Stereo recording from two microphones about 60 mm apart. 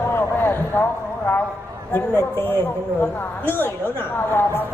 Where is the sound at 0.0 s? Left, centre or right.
Left.